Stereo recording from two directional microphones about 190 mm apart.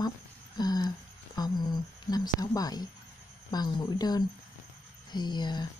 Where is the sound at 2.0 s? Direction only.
20° left (ahead or behind).